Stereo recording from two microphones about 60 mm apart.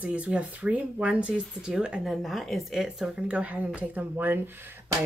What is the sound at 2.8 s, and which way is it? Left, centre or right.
Speech, centre.